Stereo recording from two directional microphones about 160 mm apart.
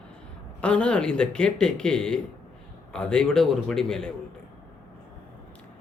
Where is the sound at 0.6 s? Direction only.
5° left (ahead or behind).